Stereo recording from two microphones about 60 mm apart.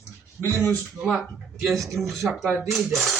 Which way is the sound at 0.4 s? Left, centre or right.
Left.